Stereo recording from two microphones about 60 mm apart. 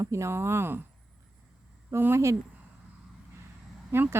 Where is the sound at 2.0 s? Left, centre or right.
Right.